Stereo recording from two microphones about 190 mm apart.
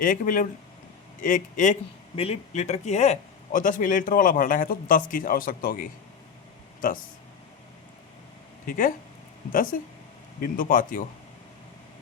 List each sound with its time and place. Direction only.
0.0 s speech: 45° left (ahead or behind)
8.6 s speech: 45° left (ahead or behind)